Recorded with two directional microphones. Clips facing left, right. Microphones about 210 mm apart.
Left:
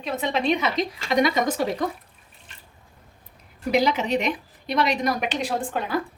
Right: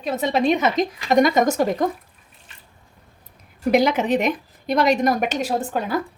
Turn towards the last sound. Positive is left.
turn(degrees=-40)  # may be behind; listen again after turning